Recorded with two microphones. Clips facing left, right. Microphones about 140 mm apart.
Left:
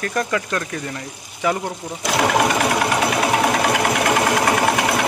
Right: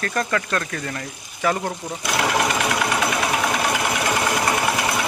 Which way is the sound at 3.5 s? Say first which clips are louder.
Left 4 dB; 55° left (ahead or behind).